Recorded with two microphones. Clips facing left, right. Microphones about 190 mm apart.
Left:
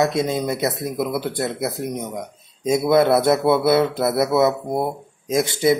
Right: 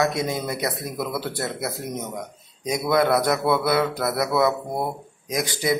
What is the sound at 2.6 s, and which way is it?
Speech, 25° left (ahead or behind).